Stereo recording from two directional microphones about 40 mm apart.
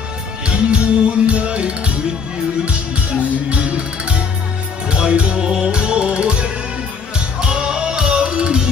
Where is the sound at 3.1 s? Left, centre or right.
Right.